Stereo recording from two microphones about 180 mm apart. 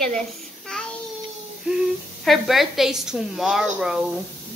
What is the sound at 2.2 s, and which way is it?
A woman's voice, centre (ahead or behind).